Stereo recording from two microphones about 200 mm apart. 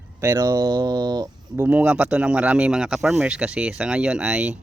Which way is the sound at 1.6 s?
5° right (ahead or behind).